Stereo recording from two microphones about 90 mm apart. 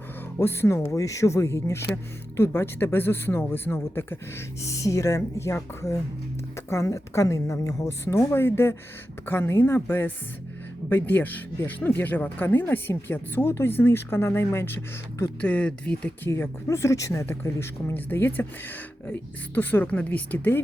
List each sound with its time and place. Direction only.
0.3 s a woman's voice: 30° left (ahead or behind)
4.6 s a woman's voice: 35° left (ahead or behind)
15.4 s speech: 15° left (ahead or behind)
16.2 s a woman's voice: 30° left (ahead or behind)